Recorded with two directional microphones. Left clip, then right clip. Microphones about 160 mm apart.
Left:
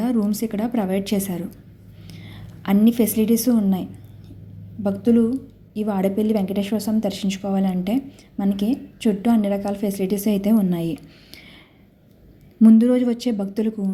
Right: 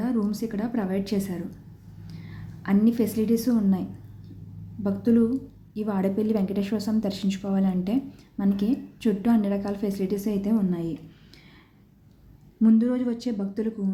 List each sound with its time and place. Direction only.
0.0 s a woman's voice: 20° left (ahead or behind)
12.6 s a woman's voice: 30° left (ahead or behind)